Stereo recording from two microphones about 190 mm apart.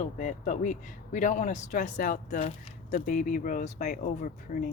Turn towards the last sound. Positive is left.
turn(degrees=45)  # may be behind; listen again after turning